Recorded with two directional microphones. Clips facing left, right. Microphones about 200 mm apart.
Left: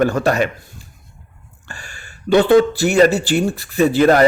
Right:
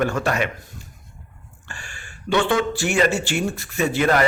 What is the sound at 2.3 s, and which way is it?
A man's voice, 35° left (ahead or behind).